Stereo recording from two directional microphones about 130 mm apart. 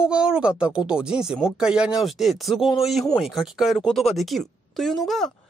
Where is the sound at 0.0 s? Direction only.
5° right (ahead or behind).